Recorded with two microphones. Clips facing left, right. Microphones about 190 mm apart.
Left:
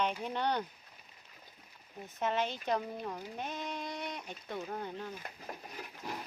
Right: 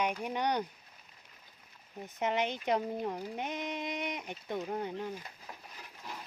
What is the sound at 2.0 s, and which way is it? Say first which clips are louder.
Speech: right 2 dB; 15° right (ahead or behind).